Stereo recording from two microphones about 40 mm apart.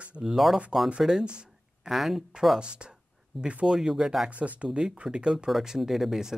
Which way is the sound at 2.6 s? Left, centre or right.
Right.